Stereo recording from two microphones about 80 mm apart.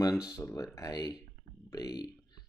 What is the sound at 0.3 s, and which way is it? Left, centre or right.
Speech, left.